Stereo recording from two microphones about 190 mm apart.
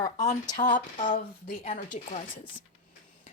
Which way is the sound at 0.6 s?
45° left (ahead or behind).